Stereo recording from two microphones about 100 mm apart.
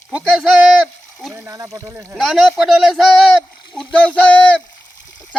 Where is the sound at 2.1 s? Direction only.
Centre (ahead or behind).